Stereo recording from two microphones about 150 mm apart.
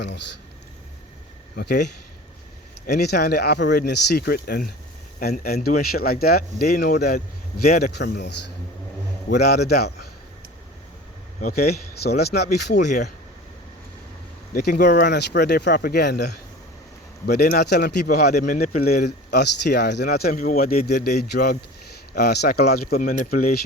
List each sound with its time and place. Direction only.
1.5 s speech: 90° left
9.4 s speech: 90° left
11.3 s speech: 80° left
14.5 s speech: 90° left
20.4 s speech: 70° left (ahead or behind)
20.8 s speech: 90° left